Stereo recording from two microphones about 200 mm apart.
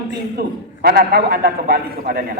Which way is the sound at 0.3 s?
50° right (ahead or behind).